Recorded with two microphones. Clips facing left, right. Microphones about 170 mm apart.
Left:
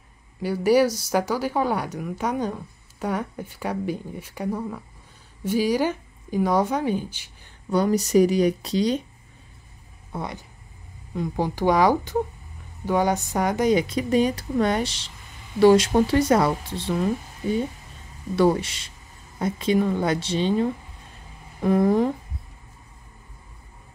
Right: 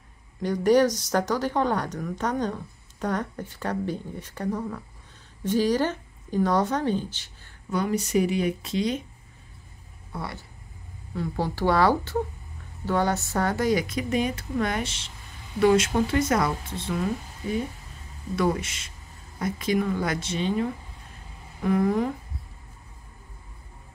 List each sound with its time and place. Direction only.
0.4 s speech: 10° left (ahead or behind)
7.7 s speech: 35° left (ahead or behind)
10.1 s speech: 20° left (ahead or behind)
18.3 s speech: 30° left (ahead or behind)
21.6 s speech: 35° left (ahead or behind)